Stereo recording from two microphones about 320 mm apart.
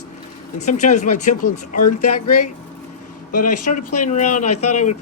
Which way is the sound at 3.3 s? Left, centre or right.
Left.